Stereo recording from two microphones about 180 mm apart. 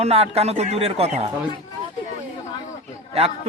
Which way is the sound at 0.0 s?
35° right (ahead or behind).